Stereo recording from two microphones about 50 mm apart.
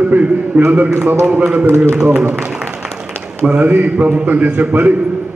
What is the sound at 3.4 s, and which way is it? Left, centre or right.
Speech, centre.